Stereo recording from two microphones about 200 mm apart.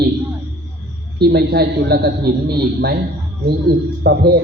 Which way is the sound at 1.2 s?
50° right (ahead or behind).